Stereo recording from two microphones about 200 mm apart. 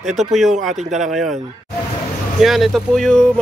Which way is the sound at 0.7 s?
35° right (ahead or behind).